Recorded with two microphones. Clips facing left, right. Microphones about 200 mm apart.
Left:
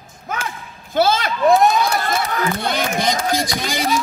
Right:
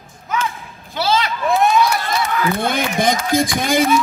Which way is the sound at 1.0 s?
50° left (ahead or behind).